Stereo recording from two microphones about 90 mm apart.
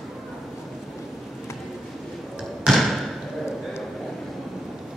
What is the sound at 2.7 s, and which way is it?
Thump, centre (ahead or behind).